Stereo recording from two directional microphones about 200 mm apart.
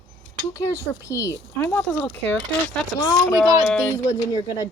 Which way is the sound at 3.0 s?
20° left (ahead or behind).